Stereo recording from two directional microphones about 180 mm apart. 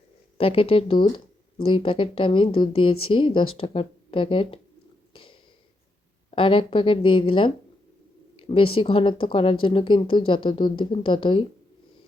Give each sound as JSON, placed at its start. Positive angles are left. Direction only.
{"t": 0.3, "sound": "speech", "side_deg": 30}
{"t": 5.1, "sound": "a sound", "side_deg": 30}
{"t": 6.3, "sound": "speech", "side_deg": 30}